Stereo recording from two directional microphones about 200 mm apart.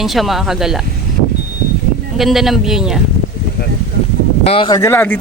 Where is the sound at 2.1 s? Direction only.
Centre (ahead or behind).